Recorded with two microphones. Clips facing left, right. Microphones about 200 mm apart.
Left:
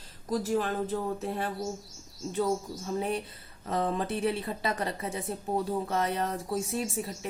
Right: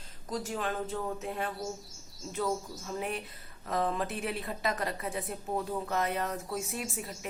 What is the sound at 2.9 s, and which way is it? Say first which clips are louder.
Speech: left 4 dB; 35° left (ahead or behind).